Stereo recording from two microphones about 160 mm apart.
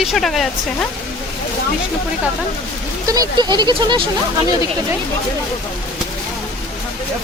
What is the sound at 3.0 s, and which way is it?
Speech, 25° right (ahead or behind).